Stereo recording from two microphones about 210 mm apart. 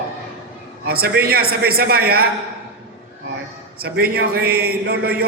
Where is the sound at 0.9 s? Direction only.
45° right (ahead or behind).